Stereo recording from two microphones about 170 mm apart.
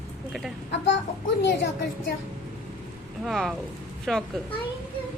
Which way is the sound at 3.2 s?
Centre (ahead or behind).